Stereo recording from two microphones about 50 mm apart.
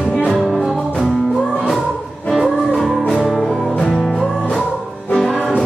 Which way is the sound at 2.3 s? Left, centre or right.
Centre.